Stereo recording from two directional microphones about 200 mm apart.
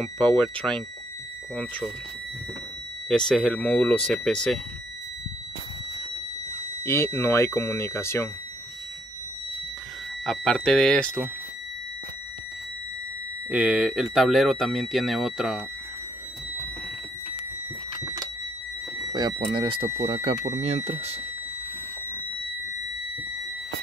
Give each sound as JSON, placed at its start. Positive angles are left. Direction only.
{"t": 0.0, "sound": "speech", "side_deg": 5}
{"t": 3.1, "sound": "speech", "side_deg": 5}
{"t": 6.8, "sound": "speech", "side_deg": 15}
{"t": 10.2, "sound": "speech", "side_deg": 0}
{"t": 13.5, "sound": "speech", "side_deg": -5}
{"t": 19.1, "sound": "speech", "side_deg": -20}